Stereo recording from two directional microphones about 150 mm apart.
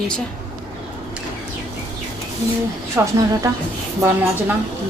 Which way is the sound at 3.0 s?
15° right (ahead or behind).